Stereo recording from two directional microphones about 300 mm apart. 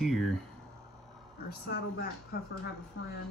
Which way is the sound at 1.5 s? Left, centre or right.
Left.